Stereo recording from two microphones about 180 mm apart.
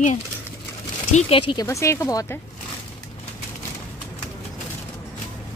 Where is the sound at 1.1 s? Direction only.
30° left (ahead or behind).